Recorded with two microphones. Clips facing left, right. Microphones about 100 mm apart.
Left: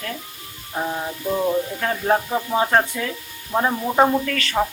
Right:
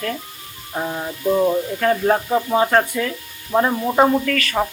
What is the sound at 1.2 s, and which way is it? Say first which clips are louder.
Speech: right 4 dB; 15° right (ahead or behind).